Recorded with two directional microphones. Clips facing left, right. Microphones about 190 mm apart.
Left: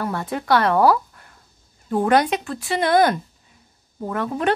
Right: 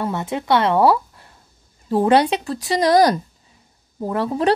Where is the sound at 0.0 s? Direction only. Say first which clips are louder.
Right 2 dB; 20° right (ahead or behind).